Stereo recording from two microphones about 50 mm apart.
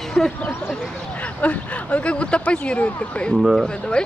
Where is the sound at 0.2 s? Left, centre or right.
Left.